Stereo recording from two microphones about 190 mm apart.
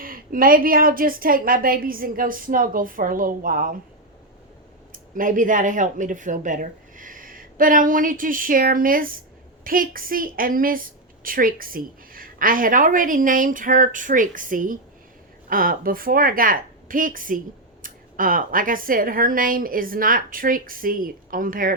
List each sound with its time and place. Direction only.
0.0 s a woman's voice: 50° right (ahead or behind)
4.9 s a woman's voice: 45° right (ahead or behind)